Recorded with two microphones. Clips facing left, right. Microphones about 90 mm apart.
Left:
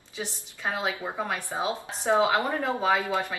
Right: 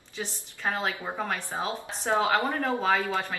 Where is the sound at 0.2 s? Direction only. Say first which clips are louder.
Even; 10° left (ahead or behind).